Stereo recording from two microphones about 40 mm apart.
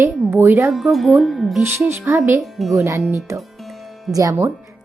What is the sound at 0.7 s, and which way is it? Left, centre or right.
Speech, centre.